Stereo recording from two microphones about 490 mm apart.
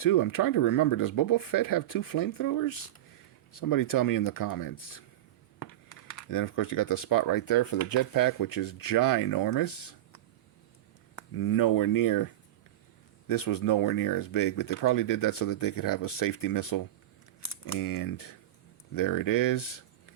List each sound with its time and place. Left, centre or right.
0.0 s speech: left
11.3 s speech: left